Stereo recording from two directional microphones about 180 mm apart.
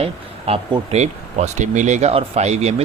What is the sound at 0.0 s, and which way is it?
Speech, 35° right (ahead or behind).